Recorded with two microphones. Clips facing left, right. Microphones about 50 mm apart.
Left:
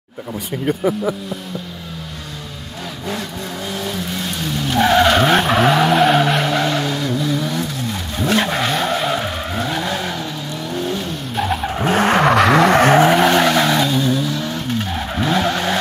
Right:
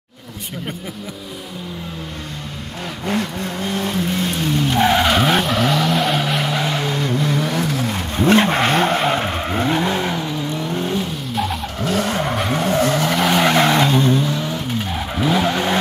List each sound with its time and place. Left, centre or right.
3.1 s vehicle: right; by 5.1 s centre
5.1 s vehicle: centre
5.5 s vehicle: centre
7.0 s vehicle: right
8.2 s vehicle: right
11.3 s vehicle: centre
11.6 s vehicle: left
12.1 s vehicle: left
13.2 s vehicle: centre
13.5 s vehicle: centre
14.9 s vehicle: centre